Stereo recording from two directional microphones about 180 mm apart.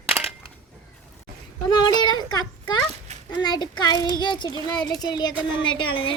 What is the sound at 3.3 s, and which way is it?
A child's voice, 25° left (ahead or behind).